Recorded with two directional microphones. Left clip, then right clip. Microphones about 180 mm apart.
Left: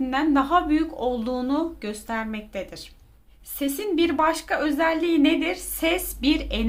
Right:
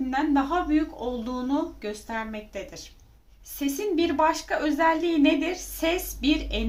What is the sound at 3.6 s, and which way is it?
A woman's voice, 30° left (ahead or behind).